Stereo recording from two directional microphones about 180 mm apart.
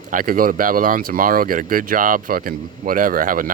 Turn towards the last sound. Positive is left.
turn(degrees=-50)  # may be behind; listen again after turning